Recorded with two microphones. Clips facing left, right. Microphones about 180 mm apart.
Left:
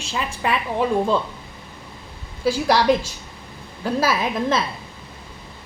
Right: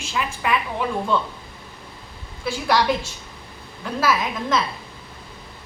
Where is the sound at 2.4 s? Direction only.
35° left (ahead or behind).